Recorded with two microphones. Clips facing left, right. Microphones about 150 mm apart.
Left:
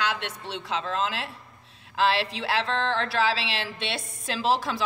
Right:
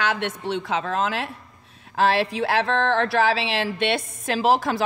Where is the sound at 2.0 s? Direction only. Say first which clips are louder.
Right 4 dB; 50° right (ahead or behind).